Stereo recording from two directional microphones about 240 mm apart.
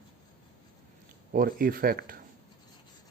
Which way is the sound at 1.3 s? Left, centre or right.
Right.